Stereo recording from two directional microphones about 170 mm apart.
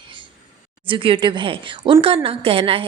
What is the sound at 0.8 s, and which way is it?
A woman's voice, 30° right (ahead or behind).